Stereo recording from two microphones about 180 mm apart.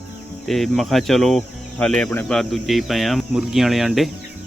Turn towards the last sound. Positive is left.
turn(degrees=0)  # may be behind; listen again after turning